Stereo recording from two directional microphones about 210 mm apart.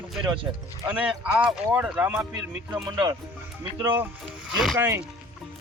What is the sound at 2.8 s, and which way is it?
Speech, 20° right (ahead or behind).